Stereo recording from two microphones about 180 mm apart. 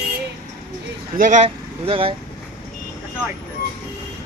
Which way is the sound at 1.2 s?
40° right (ahead or behind).